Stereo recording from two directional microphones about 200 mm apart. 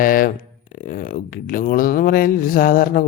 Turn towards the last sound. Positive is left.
turn(degrees=45)  # may be behind; listen again after turning